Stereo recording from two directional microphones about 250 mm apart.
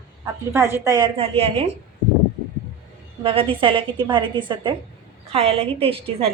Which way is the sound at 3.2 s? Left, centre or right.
Right.